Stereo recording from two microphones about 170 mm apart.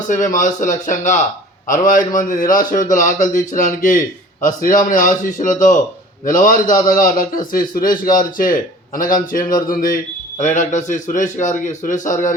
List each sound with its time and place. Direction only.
0.1 s a man's voice: 50° left (ahead or behind)